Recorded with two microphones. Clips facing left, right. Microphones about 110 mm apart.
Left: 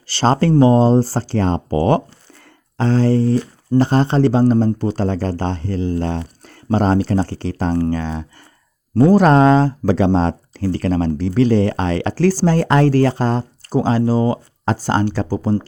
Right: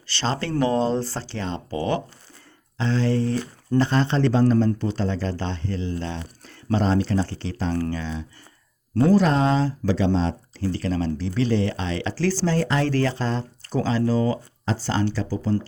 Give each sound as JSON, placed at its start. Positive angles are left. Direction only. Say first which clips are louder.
{"t": 0.2, "sound": "speech", "louder": "left 10 dB", "side_deg": 40}
{"t": 12.9, "sound": "speech", "louder": "left 7 dB", "side_deg": 40}
{"t": 14.1, "sound": "speech", "louder": "left 5 dB", "side_deg": 30}
{"t": 15.1, "sound": "speech", "louder": "left 6 dB", "side_deg": 55}